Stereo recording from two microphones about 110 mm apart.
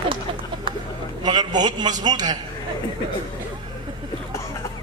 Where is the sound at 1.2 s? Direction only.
40° right (ahead or behind).